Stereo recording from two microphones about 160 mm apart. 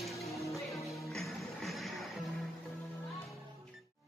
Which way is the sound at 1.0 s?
Centre (ahead or behind).